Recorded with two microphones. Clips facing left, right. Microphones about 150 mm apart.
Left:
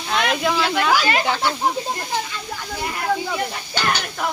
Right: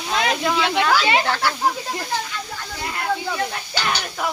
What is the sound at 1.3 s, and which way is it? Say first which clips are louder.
Speech: left 1 dB; 20° left (ahead or behind).